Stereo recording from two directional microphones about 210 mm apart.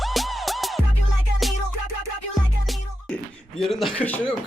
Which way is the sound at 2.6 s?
Centre (ahead or behind).